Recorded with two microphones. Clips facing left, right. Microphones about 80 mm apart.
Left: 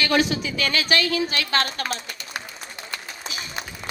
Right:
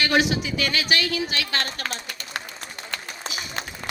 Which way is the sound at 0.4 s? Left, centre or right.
Left.